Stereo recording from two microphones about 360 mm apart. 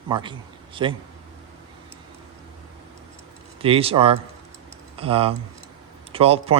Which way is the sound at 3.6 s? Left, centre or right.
Centre.